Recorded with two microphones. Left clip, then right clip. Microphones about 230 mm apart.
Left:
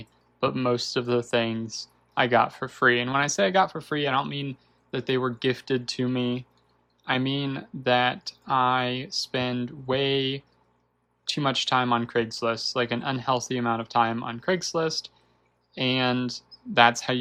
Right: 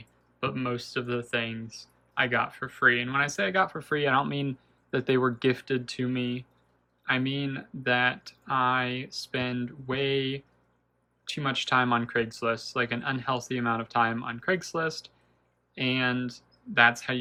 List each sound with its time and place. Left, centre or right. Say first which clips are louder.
0.0 s speech: left 6 dB; centre